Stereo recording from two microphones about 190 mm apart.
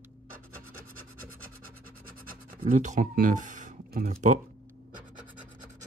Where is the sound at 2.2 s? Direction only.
40° right (ahead or behind).